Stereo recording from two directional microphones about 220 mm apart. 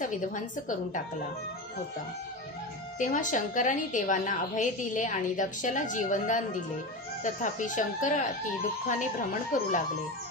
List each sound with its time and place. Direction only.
0.0 s a woman's voice: 35° left (ahead or behind)
3.0 s a woman's voice: 35° left (ahead or behind)